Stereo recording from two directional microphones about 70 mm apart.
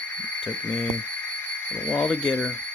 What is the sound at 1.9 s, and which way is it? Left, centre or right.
Speech, centre.